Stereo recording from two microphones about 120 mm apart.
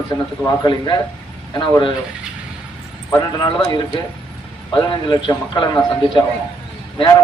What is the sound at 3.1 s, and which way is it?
A man's voice, 30° left (ahead or behind).